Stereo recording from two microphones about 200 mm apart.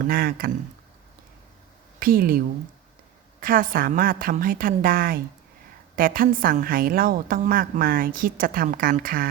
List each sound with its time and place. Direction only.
0.0 s a woman's voice: 45° right (ahead or behind)
2.0 s speech: 45° right (ahead or behind)
3.4 s a woman's voice: 45° right (ahead or behind)